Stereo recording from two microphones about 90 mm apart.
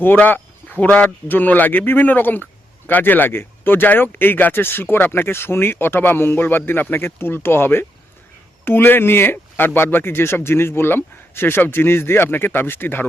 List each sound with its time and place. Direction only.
0.0 s a man's voice: 20° left (ahead or behind)